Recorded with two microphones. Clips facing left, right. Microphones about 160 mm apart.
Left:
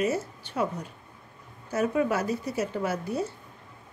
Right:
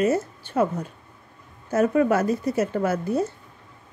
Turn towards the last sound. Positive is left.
turn(degrees=-50)  # may be behind; listen again after turning